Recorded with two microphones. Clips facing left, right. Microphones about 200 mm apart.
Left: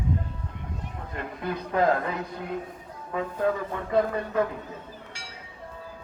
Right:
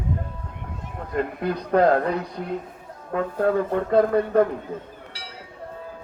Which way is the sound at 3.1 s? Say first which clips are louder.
Right 4 dB; 55° right (ahead or behind).